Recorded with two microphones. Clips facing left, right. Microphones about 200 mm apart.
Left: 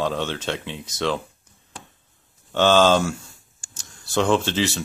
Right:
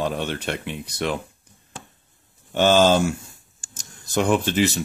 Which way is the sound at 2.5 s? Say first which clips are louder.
Even; 15° right (ahead or behind).